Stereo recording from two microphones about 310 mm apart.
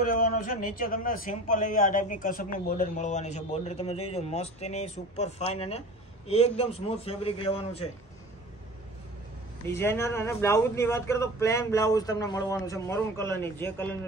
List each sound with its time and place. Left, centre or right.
0.0 s a man's voice: left
9.7 s a man's voice: centre